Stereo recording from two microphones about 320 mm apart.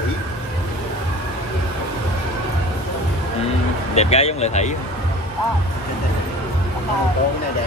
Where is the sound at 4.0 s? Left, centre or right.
Centre.